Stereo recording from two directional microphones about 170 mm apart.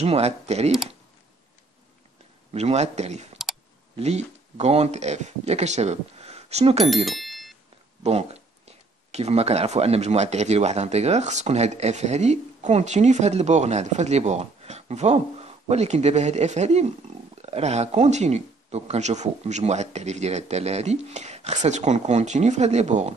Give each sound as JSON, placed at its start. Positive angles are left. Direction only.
{"t": 0.0, "sound": "speech", "side_deg": -40}
{"t": 2.5, "sound": "speech", "side_deg": -40}
{"t": 7.1, "sound": "bicycle bell", "side_deg": 0}
{"t": 8.0, "sound": "speech", "side_deg": -40}